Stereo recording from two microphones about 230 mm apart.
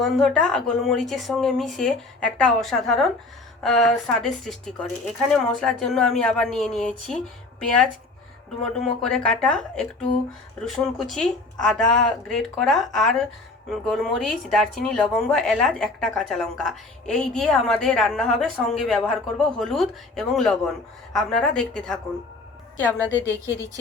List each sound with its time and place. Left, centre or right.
0.0 s speech: centre
8.8 s a woman's voice: centre